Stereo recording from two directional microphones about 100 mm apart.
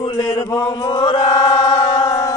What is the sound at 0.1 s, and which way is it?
Chant, 45° left (ahead or behind).